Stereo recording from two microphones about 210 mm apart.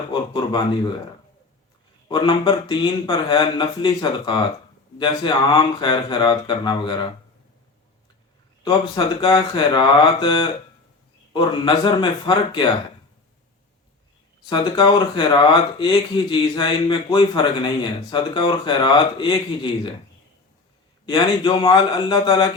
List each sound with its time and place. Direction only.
0.1 s speech: 20° left (ahead or behind)
2.0 s speech: 20° left (ahead or behind)
8.6 s speech: 25° left (ahead or behind)
14.5 s speech: 20° left (ahead or behind)
21.1 s speech: 25° left (ahead or behind)